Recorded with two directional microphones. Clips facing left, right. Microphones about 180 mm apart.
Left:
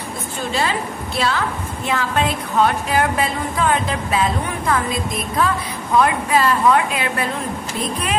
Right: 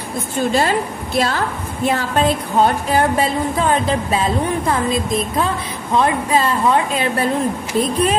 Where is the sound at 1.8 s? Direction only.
35° right (ahead or behind).